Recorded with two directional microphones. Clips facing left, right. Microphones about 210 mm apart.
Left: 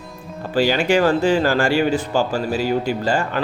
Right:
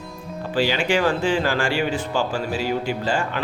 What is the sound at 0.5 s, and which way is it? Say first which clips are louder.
Speech: left 4 dB; 40° left (ahead or behind).